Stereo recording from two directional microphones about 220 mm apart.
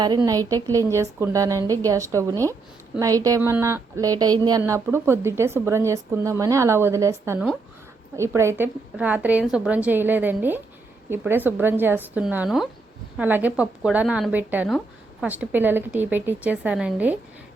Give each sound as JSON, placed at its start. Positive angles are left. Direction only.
{"t": 0.0, "sound": "a woman's voice", "side_deg": -20}